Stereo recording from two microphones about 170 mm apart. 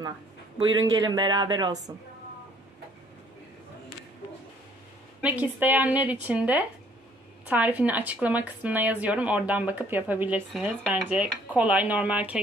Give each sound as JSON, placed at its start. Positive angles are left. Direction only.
{"t": 0.7, "sound": "speech", "side_deg": -25}
{"t": 5.2, "sound": "a woman's voice", "side_deg": -10}